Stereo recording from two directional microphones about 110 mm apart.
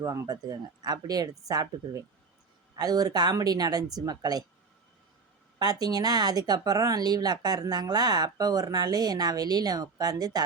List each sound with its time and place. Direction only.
0.0 s speech: 30° right (ahead or behind)
5.5 s speech: 35° right (ahead or behind)